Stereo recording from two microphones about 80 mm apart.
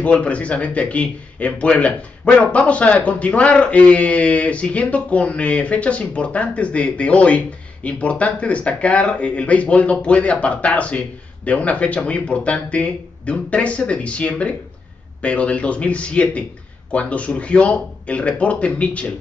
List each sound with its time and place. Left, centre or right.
0.0 s speech: centre